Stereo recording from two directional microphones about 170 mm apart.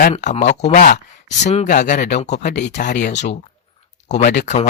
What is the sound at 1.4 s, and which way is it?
Speech, 40° left (ahead or behind).